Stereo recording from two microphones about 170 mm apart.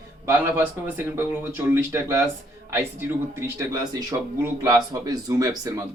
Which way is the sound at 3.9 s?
20° right (ahead or behind).